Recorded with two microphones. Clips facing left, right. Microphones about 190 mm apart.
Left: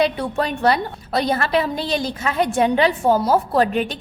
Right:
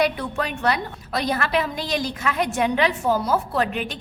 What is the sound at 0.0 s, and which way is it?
A woman's voice, 30° left (ahead or behind).